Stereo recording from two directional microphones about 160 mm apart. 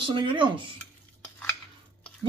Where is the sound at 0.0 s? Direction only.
30° right (ahead or behind).